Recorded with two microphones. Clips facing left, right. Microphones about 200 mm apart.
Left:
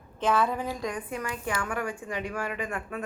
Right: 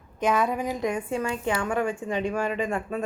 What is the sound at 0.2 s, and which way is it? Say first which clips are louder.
A woman's voice: right 2 dB; 15° right (ahead or behind).